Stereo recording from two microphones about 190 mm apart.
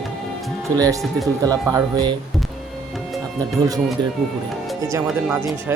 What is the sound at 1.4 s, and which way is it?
Speech, 20° right (ahead or behind).